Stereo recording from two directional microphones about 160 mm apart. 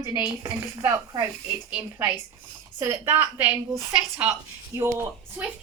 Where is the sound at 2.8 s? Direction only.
15° right (ahead or behind).